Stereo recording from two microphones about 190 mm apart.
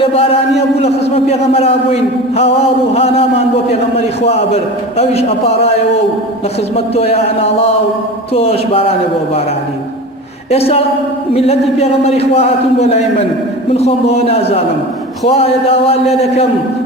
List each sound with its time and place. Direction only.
0.0 s a man's voice: 30° left (ahead or behind)
6.7 s a man's voice: 30° left (ahead or behind)
8.3 s a man's voice: 30° left (ahead or behind)
10.5 s a man's voice: 30° left (ahead or behind)